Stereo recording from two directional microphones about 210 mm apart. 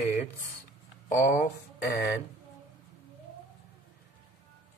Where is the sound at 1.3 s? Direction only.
45° left (ahead or behind).